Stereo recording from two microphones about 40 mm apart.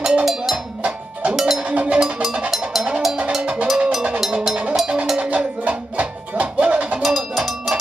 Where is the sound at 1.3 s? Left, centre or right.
Centre.